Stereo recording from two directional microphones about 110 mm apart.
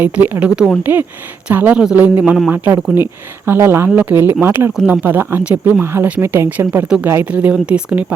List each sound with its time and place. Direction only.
0.0 s speech: 15° right (ahead or behind)